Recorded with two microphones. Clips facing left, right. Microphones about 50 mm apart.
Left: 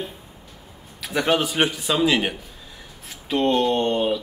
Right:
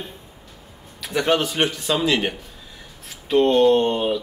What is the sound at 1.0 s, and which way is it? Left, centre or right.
A man's voice, centre.